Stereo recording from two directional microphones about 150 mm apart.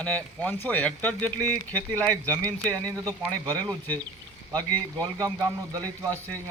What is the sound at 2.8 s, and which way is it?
Speech, 25° right (ahead or behind).